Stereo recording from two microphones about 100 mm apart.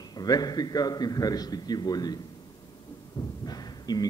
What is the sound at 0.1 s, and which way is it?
A man's voice, 40° left (ahead or behind).